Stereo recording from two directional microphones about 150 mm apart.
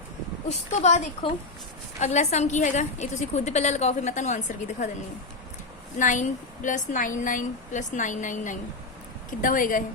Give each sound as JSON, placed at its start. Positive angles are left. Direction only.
{"t": 0.4, "sound": "a woman's voice", "side_deg": 50}
{"t": 6.0, "sound": "a woman's voice", "side_deg": 60}